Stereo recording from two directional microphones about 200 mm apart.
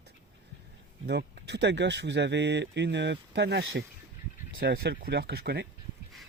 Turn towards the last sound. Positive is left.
turn(degrees=-55)  # may be behind; listen again after turning